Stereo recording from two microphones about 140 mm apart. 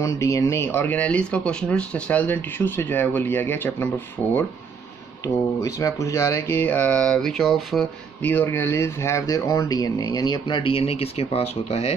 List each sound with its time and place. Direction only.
0.0 s speech: 20° left (ahead or behind); by 7.9 s centre (ahead or behind)
8.2 s speech: 15° left (ahead or behind); by 11.9 s 45° left (ahead or behind)